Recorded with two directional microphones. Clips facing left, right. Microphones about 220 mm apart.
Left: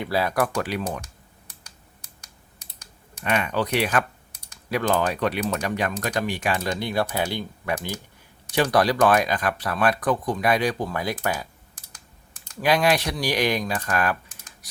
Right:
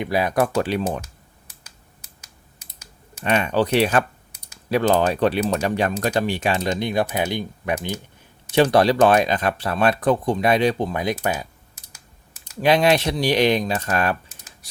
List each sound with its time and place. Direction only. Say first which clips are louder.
0.0 s speech: right 3 dB; 15° right (ahead or behind)
1.6 s computer keyboard: even; 5° right (ahead or behind)
3.2 s speech: right 4 dB; 30° right (ahead or behind)
12.5 s speech: right 4 dB; 25° right (ahead or behind)